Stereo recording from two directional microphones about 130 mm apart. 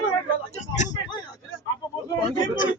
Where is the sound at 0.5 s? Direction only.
65° left (ahead or behind).